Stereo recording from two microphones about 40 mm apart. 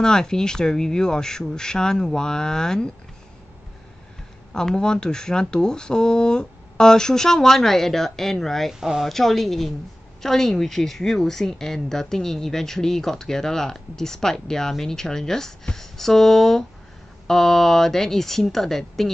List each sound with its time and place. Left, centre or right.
0.0 s speech: centre
4.6 s speech: centre
8.7 s speech: centre
9.0 s speech: centre